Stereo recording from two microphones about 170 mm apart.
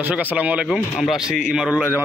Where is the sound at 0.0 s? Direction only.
10° right (ahead or behind).